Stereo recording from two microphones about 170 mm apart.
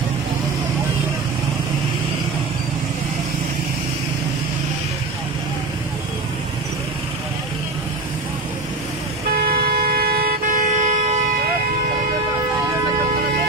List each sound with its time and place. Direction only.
9.3 s vehicle: 60° right (ahead or behind); by 11.3 s 40° right (ahead or behind)